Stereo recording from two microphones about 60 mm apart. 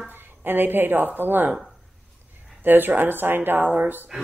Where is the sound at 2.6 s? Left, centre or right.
Right.